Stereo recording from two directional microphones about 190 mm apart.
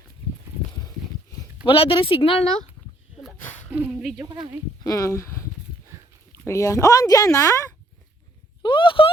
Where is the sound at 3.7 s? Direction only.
10° right (ahead or behind).